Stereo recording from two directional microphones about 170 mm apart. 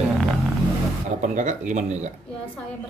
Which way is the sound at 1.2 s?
45° right (ahead or behind).